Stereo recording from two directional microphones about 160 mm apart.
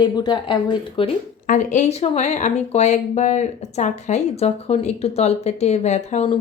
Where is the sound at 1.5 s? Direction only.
50° left (ahead or behind).